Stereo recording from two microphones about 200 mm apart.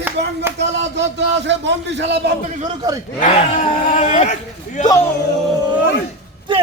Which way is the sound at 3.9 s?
35° left (ahead or behind).